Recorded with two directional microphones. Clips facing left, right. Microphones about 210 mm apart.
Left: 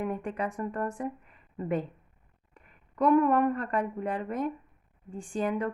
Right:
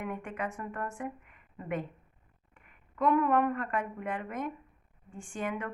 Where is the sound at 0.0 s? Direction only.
35° left (ahead or behind).